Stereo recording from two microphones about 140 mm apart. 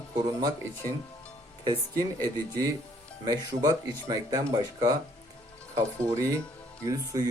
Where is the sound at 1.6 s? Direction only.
25° right (ahead or behind).